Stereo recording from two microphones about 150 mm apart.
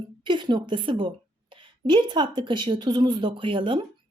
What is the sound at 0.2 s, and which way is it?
A woman's voice, 30° right (ahead or behind).